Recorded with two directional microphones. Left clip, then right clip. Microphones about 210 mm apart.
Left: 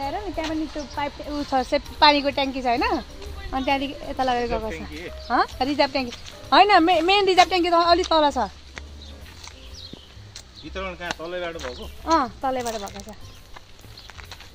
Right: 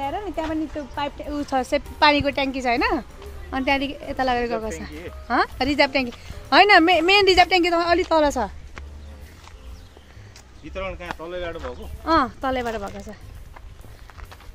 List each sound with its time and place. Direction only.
0.0 s speech: 5° right (ahead or behind)
0.4 s speech: 10° left (ahead or behind)
0.9 s a woman's voice: 5° right (ahead or behind)
5.3 s a woman's voice: 25° right (ahead or behind)
10.7 s speech: 5° left (ahead or behind)
11.2 s a woman's voice: 10° right (ahead or behind)
12.0 s a woman's voice: 30° right (ahead or behind)